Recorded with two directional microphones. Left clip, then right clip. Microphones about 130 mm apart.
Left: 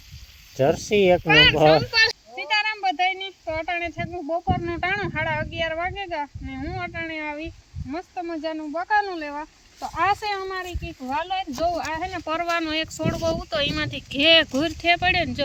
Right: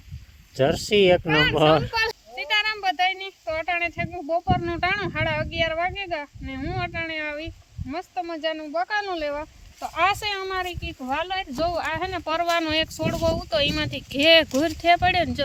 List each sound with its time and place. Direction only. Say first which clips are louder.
0.5 s speech: even; 45° right (ahead or behind)
1.3 s a child's voice: left 6 dB; 5° right (ahead or behind)
1.7 s a child's voice: left 2 dB; 25° right (ahead or behind)
2.3 s a sound: even; 25° right (ahead or behind)
3.7 s speech: right 2 dB; 35° right (ahead or behind); by 10.8 s 90° right
11.1 s speech: left 1 dB; 50° right (ahead or behind); by 14.5 s 75° right (ahead or behind)
14.6 s speech: right 1 dB; 85° right